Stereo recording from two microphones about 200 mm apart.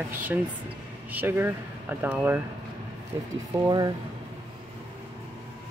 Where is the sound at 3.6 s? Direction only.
20° right (ahead or behind).